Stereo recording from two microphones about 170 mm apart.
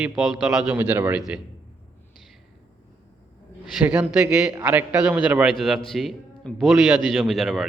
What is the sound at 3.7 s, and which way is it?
A man's voice, 10° right (ahead or behind).